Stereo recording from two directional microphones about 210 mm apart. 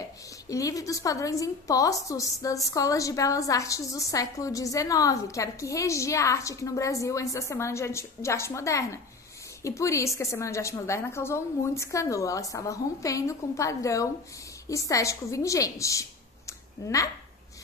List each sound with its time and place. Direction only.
0.5 s a woman's voice: 15° left (ahead or behind)